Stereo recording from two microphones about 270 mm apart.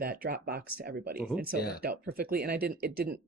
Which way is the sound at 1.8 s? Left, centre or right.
Right.